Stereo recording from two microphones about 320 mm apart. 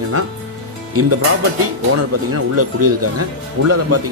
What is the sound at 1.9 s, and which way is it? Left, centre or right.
Speech, right.